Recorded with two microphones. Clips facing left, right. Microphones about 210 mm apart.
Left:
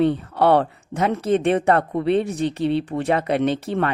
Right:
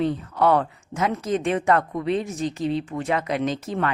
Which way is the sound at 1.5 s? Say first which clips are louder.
Left 3 dB; 30° left (ahead or behind).